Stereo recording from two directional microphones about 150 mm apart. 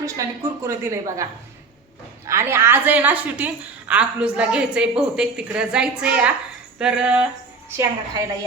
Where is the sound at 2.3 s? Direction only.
15° right (ahead or behind).